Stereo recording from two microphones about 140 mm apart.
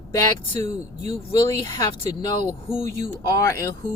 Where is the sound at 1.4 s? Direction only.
30° left (ahead or behind).